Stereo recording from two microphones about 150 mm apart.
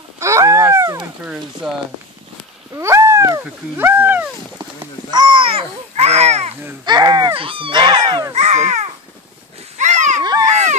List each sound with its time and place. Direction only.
0.2 s a sound: 20° right (ahead or behind)
1.2 s speech: 5° right (ahead or behind)
2.7 s speech: 20° right (ahead or behind)
5.1 s speech: 30° right (ahead or behind); by 6.5 s 45° right (ahead or behind)
6.8 s speech: 25° right (ahead or behind)
8.3 s speech: 50° right (ahead or behind)
9.8 s a sound: 50° right (ahead or behind)